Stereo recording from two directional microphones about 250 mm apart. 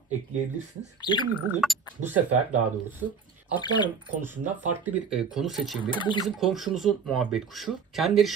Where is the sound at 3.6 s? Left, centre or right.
Centre.